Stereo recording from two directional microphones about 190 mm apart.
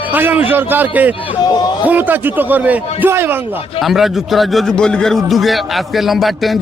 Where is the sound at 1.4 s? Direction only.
20° left (ahead or behind).